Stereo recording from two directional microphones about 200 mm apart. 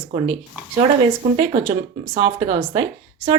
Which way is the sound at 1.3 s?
25° right (ahead or behind).